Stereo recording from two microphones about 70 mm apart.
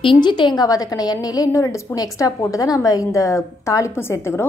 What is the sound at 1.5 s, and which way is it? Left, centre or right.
A woman's voice, left.